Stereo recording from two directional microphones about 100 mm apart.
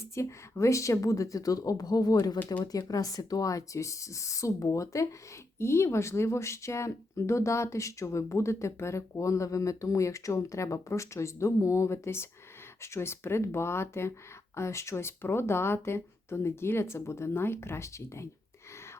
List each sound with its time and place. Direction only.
0.0 s speech: 30° left (ahead or behind)